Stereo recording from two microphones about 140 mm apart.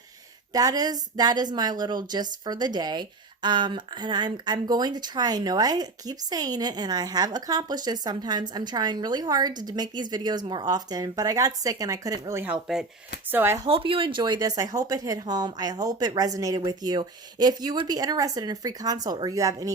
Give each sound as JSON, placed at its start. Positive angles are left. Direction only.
{"t": 0.5, "sound": "a woman's voice", "side_deg": -25}
{"t": 12.7, "sound": "speech", "side_deg": -5}
{"t": 13.3, "sound": "speech", "side_deg": -15}
{"t": 13.7, "sound": "a woman's voice", "side_deg": -40}